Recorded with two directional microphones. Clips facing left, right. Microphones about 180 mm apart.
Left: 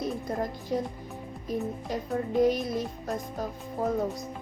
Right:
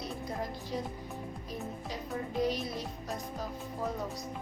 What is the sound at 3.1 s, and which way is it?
Speech, 50° left (ahead or behind).